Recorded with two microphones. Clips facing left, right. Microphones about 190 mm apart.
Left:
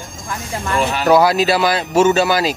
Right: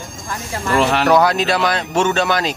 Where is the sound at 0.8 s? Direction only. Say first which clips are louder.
Right 3 dB; 65° right (ahead or behind).